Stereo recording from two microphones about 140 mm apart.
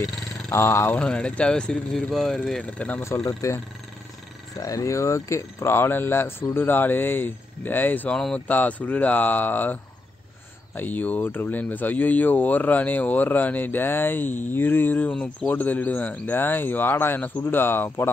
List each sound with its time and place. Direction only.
0.5 s speech: 20° left (ahead or behind)